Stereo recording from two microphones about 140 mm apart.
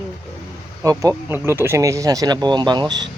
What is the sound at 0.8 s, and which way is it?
Speech, 25° right (ahead or behind).